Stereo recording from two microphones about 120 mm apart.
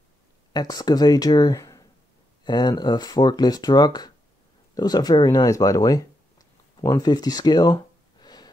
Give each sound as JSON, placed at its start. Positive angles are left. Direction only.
{"t": 0.5, "sound": "speech", "side_deg": 35}